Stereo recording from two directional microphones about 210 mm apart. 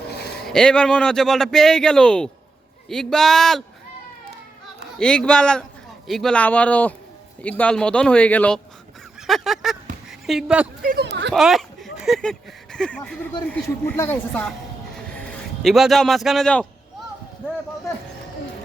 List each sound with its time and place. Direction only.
0.4 s a man's voice: 5° left (ahead or behind)
4.9 s a man's voice: 5° left (ahead or behind)
10.8 s speech: 50° right (ahead or behind)
11.3 s speech: centre (ahead or behind)
14.9 s a sound: 5° left (ahead or behind)